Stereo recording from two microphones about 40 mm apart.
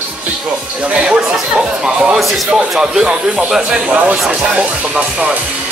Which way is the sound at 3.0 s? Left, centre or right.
Right.